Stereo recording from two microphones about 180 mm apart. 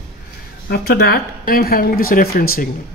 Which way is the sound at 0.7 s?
65° left (ahead or behind).